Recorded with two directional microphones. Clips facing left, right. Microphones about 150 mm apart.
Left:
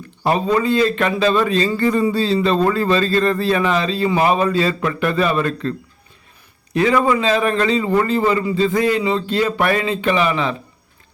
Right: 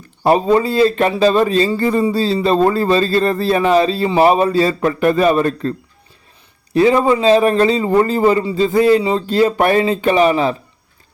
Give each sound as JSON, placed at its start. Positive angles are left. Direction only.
{"t": 0.2, "sound": "a man's voice", "side_deg": -35}
{"t": 6.7, "sound": "a man's voice", "side_deg": -30}